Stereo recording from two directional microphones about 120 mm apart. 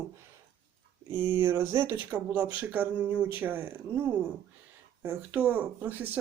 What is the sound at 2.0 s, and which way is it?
Speech, 15° right (ahead or behind).